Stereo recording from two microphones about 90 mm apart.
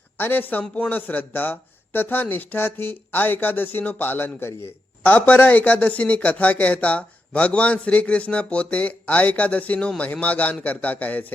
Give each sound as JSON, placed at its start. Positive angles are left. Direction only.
{"t": 0.2, "sound": "speech", "side_deg": 20}